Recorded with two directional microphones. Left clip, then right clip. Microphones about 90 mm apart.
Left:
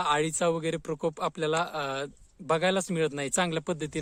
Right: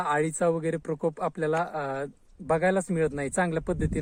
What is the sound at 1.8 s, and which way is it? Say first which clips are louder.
Speech: right 1 dB; 15° left (ahead or behind).